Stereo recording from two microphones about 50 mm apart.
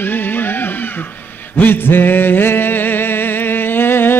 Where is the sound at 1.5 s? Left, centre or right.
Left.